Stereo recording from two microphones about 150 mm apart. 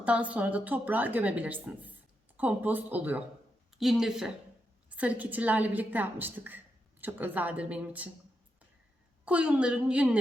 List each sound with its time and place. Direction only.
0.0 s speech: 10° right (ahead or behind)
9.2 s speech: 10° right (ahead or behind)